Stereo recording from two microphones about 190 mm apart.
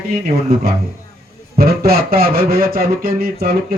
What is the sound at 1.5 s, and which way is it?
Speech, 55° right (ahead or behind).